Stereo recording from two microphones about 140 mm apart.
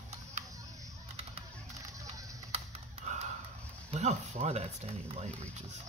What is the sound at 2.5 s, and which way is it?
Computer keyboard, 55° right (ahead or behind).